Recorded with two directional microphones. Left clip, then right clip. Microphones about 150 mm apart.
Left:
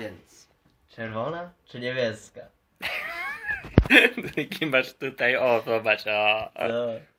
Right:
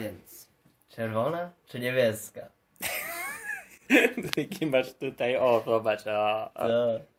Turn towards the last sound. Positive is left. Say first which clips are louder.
# right 2 dB
turn(degrees=-20)  # may be behind; listen again after turning